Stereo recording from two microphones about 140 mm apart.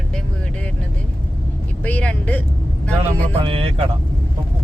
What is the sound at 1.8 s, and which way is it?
Vehicle, 10° left (ahead or behind).